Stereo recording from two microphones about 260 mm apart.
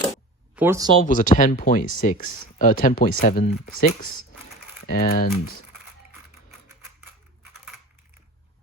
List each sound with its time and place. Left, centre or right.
0.5 s speech: centre
1.0 s speech: left